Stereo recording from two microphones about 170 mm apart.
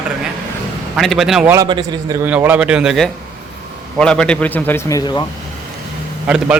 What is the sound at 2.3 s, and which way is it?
A man's voice, 10° right (ahead or behind).